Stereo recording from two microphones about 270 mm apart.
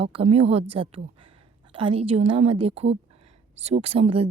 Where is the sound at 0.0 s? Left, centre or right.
Right.